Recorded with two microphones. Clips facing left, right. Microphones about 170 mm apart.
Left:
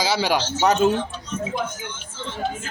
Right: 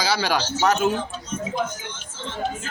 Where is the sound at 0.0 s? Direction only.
20° left (ahead or behind).